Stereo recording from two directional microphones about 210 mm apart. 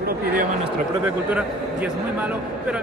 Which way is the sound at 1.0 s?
5° right (ahead or behind).